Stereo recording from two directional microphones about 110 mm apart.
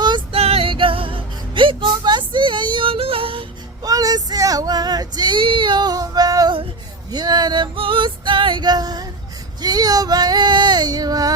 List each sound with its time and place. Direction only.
0.3 s music: 65° right (ahead or behind)
3.8 s child singing: 35° right (ahead or behind)
7.1 s male singing: 40° right (ahead or behind)
9.6 s female singing: 35° right (ahead or behind)